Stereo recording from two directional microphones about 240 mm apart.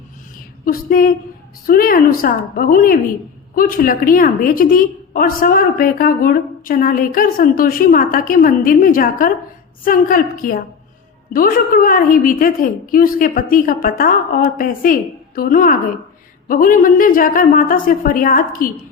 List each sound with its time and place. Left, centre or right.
0.6 s a woman's voice: left